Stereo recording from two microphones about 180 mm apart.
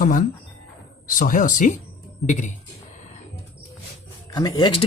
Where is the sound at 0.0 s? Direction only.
45° left (ahead or behind).